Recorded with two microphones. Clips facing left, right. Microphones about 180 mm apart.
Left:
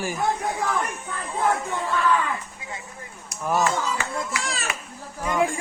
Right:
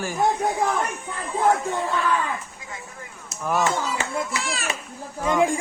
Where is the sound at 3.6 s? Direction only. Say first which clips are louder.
Even; 25° right (ahead or behind).